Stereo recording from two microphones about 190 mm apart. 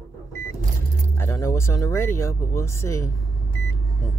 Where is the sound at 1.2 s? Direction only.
15° left (ahead or behind).